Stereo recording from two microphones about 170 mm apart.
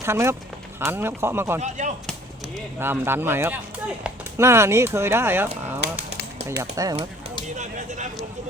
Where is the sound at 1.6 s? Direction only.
45° right (ahead or behind).